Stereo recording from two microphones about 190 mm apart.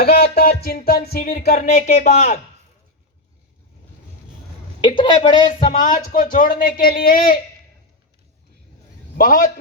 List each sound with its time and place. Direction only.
0.0 s music: 55° left (ahead or behind)
4.8 s a woman's voice: 25° left (ahead or behind)
5.7 s music: 45° left (ahead or behind)
9.1 s music: 45° left (ahead or behind)